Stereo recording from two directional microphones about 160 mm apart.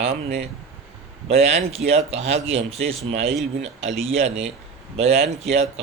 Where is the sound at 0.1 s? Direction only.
90° right.